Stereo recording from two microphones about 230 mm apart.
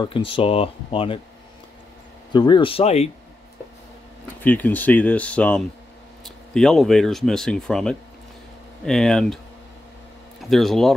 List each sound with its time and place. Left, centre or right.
0.0 s speech: left
2.3 s speech: centre
4.4 s speech: centre
10.5 s speech: centre